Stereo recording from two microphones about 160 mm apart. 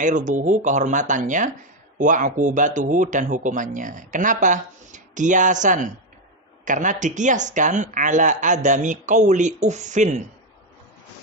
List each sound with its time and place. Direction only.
0.0 s speech: 50° right (ahead or behind)